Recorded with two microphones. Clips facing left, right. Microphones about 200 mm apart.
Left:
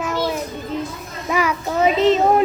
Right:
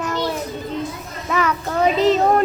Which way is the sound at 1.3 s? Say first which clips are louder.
Left 1 dB; 10° left (ahead or behind).